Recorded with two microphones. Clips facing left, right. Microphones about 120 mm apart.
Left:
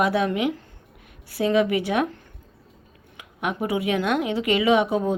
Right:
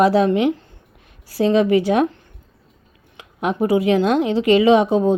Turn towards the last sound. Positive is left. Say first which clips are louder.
# right 6 dB
turn(degrees=-30)  # may be behind; listen again after turning